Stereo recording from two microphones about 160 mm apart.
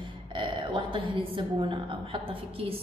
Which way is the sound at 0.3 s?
30° right (ahead or behind).